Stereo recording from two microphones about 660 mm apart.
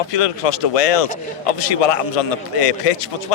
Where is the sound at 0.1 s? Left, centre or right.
Left.